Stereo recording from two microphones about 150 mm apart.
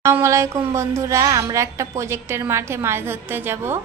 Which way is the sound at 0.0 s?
20° right (ahead or behind).